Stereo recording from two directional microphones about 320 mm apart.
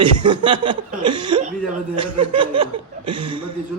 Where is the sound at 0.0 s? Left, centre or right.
Centre.